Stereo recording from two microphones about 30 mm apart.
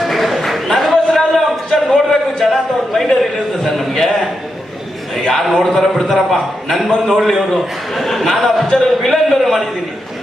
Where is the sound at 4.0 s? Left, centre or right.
Centre.